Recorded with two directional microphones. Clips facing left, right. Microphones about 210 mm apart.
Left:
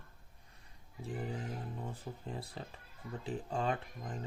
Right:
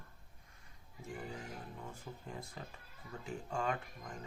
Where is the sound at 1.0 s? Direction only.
30° left (ahead or behind).